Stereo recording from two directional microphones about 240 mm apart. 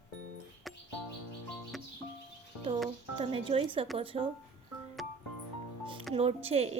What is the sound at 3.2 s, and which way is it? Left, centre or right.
A woman's voice, right.